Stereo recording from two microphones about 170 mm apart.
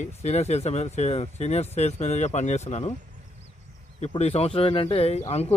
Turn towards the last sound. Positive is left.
turn(degrees=40)  # may be behind; listen again after turning